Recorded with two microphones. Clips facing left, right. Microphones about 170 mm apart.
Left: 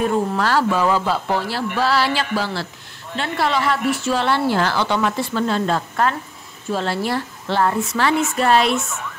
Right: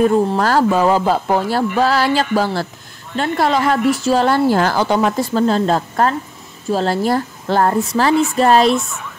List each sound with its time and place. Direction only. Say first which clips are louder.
0.4 s speech: right 4 dB; 45° right (ahead or behind)